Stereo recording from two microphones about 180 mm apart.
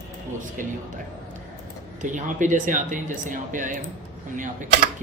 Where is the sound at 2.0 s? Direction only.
45° right (ahead or behind).